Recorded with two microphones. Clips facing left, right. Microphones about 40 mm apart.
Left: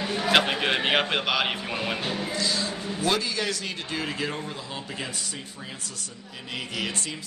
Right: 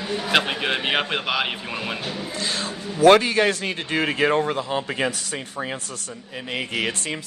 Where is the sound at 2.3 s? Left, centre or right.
Right.